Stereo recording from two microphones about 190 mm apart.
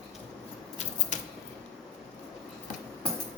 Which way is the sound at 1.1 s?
40° left (ahead or behind).